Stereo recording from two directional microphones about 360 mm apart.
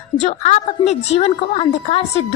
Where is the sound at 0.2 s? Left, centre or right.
Centre.